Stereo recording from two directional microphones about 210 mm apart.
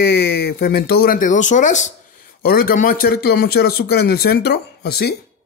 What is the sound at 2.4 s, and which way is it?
Speech, 45° left (ahead or behind).